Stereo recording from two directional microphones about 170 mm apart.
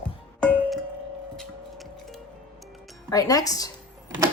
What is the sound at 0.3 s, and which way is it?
Music, 5° left (ahead or behind).